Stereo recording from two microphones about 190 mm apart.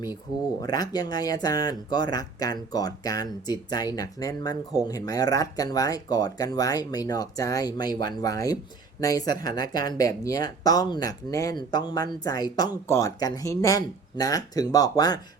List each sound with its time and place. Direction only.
0.6 s speech: 20° left (ahead or behind)